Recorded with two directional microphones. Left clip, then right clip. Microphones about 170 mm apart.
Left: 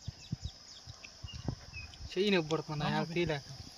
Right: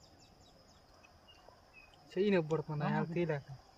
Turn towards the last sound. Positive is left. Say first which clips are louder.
# left 2 dB
turn(degrees=20)  # may be behind; listen again after turning